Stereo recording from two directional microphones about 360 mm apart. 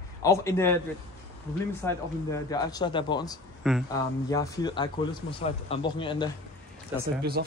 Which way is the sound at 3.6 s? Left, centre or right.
Centre.